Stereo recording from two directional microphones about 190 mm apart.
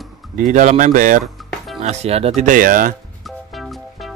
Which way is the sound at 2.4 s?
45° right (ahead or behind).